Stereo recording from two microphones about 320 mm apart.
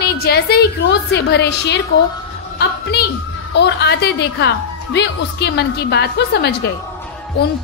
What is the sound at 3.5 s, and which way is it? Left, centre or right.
A woman's voice, left.